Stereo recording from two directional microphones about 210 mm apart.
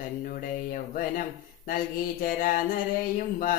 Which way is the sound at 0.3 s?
40° left (ahead or behind).